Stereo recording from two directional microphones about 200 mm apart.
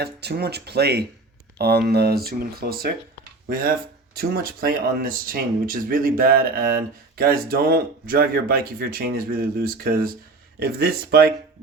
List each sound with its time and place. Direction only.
0.0 s speech: 55° right (ahead or behind)